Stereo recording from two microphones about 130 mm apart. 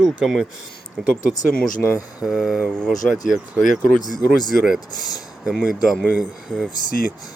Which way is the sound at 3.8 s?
90° left.